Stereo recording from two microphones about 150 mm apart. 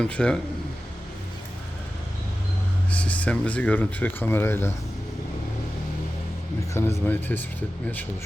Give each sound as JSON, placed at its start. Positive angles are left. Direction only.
{"t": 0.0, "sound": "speech", "side_deg": 5}
{"t": 2.9, "sound": "speech", "side_deg": 10}
{"t": 6.7, "sound": "speech", "side_deg": 15}